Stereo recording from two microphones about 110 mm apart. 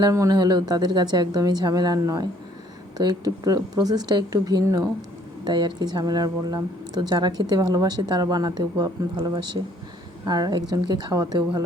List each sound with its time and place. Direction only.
0.0 s a woman's voice: 30° right (ahead or behind)